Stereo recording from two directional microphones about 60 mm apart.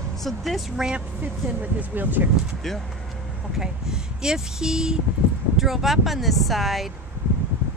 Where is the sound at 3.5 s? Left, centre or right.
Centre.